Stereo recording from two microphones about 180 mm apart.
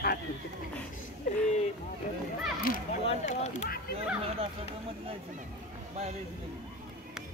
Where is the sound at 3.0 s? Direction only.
35° left (ahead or behind).